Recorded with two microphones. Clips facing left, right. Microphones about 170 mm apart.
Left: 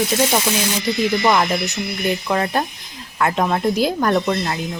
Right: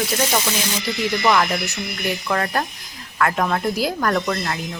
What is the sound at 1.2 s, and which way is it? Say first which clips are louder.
Speech: left 2 dB; 20° left (ahead or behind).